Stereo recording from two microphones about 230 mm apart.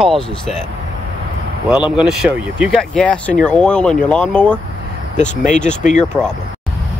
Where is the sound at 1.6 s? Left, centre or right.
Centre.